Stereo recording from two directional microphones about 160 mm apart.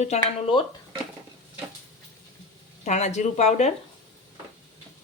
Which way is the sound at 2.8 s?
45° left (ahead or behind).